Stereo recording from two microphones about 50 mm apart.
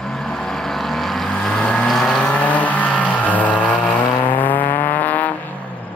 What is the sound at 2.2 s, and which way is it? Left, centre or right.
Vehicle, left.